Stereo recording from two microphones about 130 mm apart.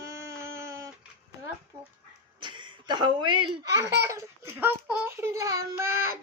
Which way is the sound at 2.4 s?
35° right (ahead or behind).